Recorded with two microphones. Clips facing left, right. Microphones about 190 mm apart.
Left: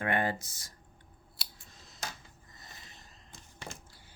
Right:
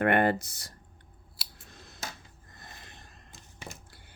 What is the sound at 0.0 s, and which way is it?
Speech, 60° right (ahead or behind).